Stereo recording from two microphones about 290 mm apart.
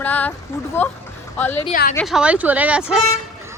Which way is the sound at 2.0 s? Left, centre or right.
Centre.